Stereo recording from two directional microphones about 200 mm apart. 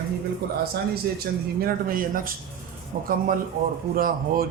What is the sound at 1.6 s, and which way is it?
A man's voice, 45° right (ahead or behind).